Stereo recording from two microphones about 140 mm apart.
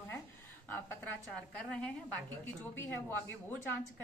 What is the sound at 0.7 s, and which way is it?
A woman's voice, 10° left (ahead or behind).